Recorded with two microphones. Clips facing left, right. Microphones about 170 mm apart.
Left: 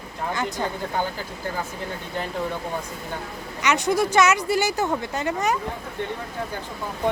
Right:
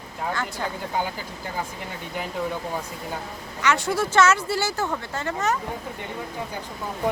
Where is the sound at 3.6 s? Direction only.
20° left (ahead or behind).